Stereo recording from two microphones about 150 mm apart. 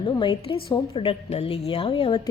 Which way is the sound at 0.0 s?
30° left (ahead or behind).